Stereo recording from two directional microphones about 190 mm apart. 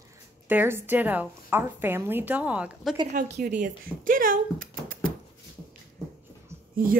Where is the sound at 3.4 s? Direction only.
40° right (ahead or behind).